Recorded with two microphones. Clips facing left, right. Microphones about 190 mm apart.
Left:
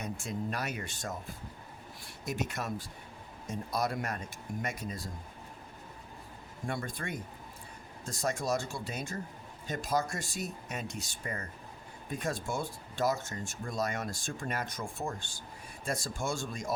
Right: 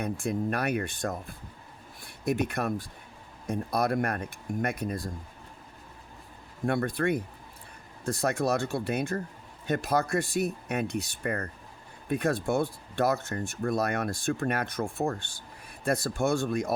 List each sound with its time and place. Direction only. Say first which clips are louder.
0.0 s speech: right 7 dB; 60° right (ahead or behind)
6.7 s speech: right 10 dB; 65° right (ahead or behind)